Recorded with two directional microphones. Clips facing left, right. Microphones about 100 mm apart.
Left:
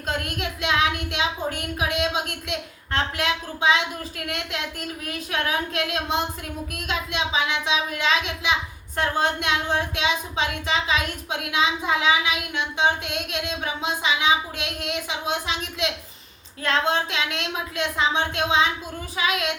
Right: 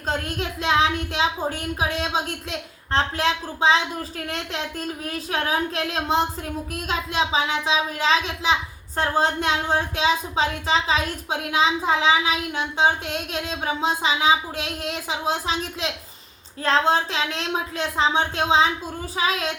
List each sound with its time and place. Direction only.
0.1 s speech: 35° right (ahead or behind)